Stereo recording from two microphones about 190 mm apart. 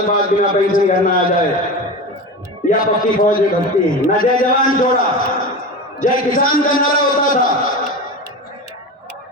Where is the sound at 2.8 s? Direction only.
45° left (ahead or behind).